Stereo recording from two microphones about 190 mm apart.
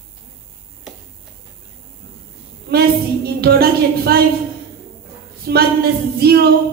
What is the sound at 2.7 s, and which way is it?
A woman's voice, 55° right (ahead or behind).